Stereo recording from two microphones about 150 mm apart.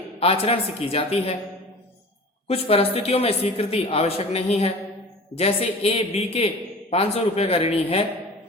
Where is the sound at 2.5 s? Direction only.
40° left (ahead or behind).